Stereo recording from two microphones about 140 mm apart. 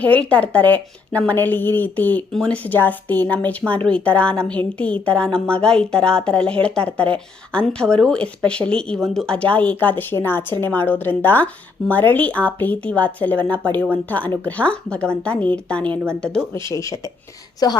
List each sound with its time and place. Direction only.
0.0 s a woman's voice: 10° left (ahead or behind)
16.6 s speech: 20° left (ahead or behind)